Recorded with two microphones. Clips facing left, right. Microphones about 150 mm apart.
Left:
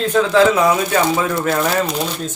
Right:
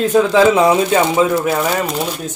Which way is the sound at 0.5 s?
25° right (ahead or behind).